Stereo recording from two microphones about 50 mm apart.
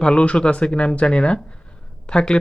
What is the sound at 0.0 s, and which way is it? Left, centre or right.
Speech, left.